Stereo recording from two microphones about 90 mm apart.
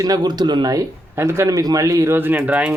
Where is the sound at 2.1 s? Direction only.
20° right (ahead or behind).